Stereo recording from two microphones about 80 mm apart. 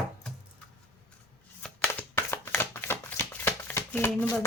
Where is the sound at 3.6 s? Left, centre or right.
Left.